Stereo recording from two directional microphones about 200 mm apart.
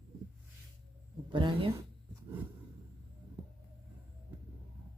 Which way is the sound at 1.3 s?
25° right (ahead or behind).